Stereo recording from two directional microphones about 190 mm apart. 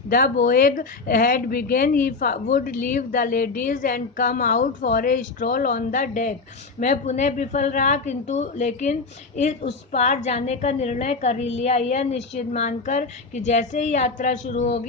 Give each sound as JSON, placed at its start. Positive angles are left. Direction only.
{"t": 0.1, "sound": "a woman's voice", "side_deg": 50}